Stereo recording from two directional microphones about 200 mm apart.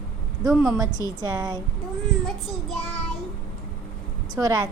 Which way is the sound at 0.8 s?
20° right (ahead or behind).